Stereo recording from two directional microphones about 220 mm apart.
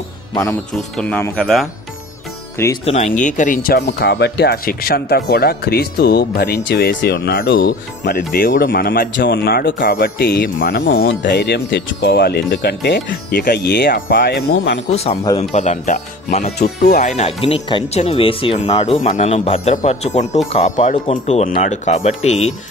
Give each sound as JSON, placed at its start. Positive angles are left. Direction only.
{"t": 0.9, "sound": "speech", "side_deg": 5}
{"t": 2.8, "sound": "speech", "side_deg": 30}
{"t": 14.5, "sound": "speech", "side_deg": 50}
{"t": 14.9, "sound": "speech", "side_deg": 30}
{"t": 16.5, "sound": "speech", "side_deg": 45}
{"t": 16.9, "sound": "speech", "side_deg": 35}